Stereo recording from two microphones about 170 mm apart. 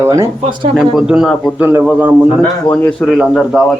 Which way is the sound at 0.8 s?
5° right (ahead or behind).